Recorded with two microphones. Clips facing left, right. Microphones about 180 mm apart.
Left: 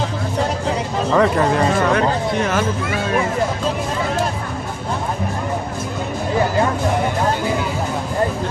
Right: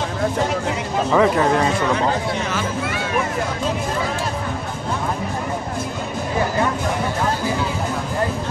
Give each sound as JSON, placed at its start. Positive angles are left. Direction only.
{"t": 1.1, "sound": "speech", "side_deg": 0}
{"t": 2.0, "sound": "speech", "side_deg": 50}